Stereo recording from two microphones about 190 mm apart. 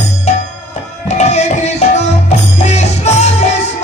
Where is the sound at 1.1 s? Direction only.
35° left (ahead or behind).